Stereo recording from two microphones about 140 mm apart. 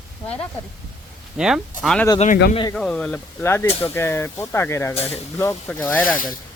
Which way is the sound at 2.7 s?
5° left (ahead or behind).